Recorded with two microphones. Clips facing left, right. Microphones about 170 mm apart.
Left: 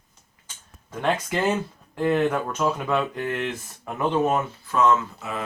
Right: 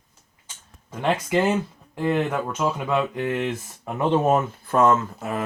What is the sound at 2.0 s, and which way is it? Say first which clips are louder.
Speech: left 1 dB; 10° right (ahead or behind).